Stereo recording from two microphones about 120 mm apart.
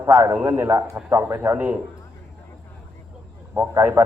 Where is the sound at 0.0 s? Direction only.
20° right (ahead or behind).